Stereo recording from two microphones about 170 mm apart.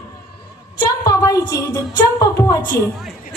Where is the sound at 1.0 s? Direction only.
20° left (ahead or behind).